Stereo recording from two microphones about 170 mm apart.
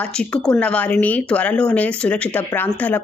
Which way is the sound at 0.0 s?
5° left (ahead or behind).